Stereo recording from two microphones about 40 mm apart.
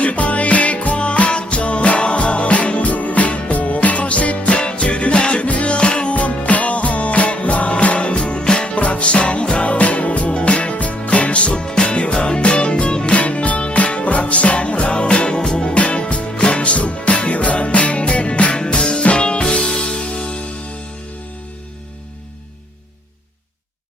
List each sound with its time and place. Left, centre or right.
0.0 s music: left
4.5 s music: left
6.1 s music: left
18.5 s music: centre